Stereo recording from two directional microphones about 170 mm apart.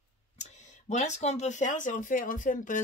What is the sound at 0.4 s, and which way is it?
Speech, 45° left (ahead or behind).